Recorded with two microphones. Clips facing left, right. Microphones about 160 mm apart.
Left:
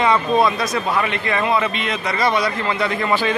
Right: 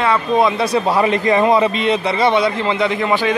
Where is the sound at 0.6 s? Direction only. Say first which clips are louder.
Right 5 dB; 35° right (ahead or behind).